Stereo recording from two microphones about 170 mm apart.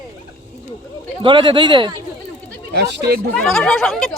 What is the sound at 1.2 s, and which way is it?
Speech, 30° right (ahead or behind).